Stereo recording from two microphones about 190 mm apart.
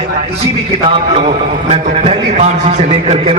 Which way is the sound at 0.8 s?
30° right (ahead or behind).